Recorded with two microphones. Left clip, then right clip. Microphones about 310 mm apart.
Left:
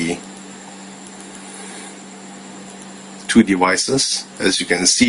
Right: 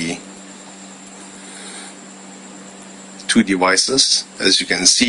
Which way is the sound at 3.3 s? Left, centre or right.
Centre.